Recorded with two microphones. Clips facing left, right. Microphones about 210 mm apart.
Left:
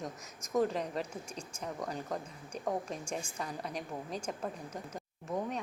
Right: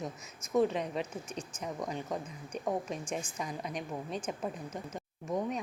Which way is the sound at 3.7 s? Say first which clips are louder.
Right 2 dB; 35° left (ahead or behind).